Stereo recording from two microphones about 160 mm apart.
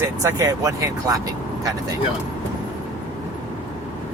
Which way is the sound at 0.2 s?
20° right (ahead or behind).